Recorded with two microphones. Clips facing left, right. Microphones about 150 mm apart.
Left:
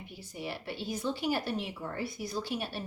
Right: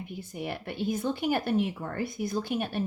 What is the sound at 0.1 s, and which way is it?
Speech, 55° right (ahead or behind).